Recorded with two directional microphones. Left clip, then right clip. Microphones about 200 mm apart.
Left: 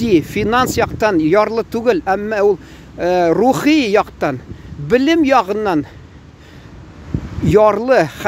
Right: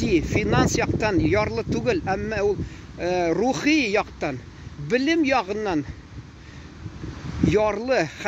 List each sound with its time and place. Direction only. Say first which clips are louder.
0.0 s speech: left 7 dB; 25° left (ahead or behind)
7.4 s speech: left 10 dB; 25° left (ahead or behind)